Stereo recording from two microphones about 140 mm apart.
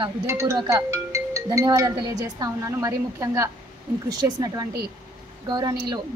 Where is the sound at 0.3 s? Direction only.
20° right (ahead or behind).